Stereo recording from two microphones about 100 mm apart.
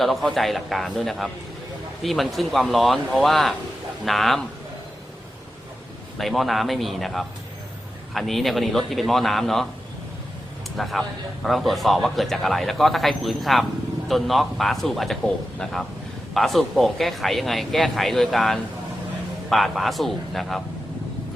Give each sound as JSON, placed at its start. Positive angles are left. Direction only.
{"t": 0.0, "sound": "speech", "side_deg": 0}
{"t": 6.1, "sound": "speech", "side_deg": 0}
{"t": 10.8, "sound": "speech", "side_deg": 0}